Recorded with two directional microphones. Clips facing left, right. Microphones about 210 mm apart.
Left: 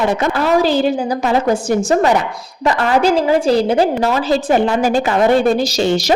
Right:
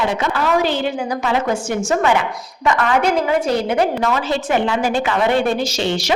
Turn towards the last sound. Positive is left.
turn(degrees=40)  # may be behind; listen again after turning